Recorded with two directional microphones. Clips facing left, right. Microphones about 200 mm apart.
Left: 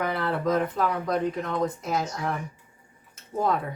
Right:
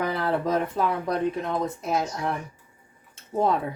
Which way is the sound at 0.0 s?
25° right (ahead or behind).